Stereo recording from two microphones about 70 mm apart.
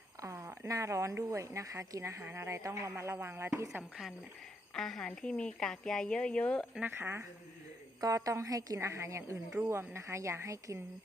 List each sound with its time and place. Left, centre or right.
0.2 s speech: right
2.2 s speech: right
4.7 s speech: centre
6.8 s speech: right
8.0 s a woman's voice: right